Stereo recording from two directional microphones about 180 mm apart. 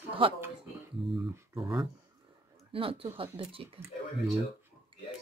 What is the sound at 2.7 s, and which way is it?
A woman's voice, 30° right (ahead or behind).